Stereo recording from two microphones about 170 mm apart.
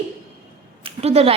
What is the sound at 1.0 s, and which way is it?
Speech, 35° right (ahead or behind).